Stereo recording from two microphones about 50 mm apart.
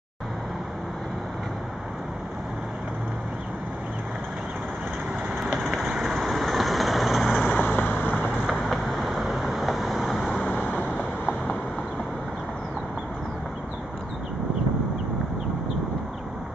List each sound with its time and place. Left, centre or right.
5.5 s vehicle: centre
7.5 s vehicle: left
8.5 s vehicle: centre
10.4 s vehicle: left